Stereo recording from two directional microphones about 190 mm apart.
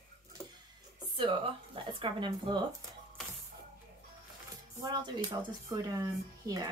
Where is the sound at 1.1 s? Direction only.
25° right (ahead or behind).